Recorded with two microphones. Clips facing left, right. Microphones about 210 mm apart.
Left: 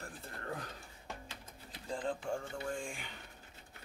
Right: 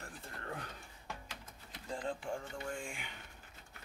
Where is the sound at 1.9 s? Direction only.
35° left (ahead or behind).